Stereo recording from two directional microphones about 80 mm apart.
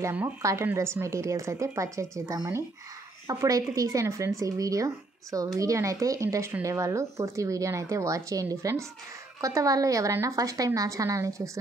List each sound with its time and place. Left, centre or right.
0.4 s a woman's voice: right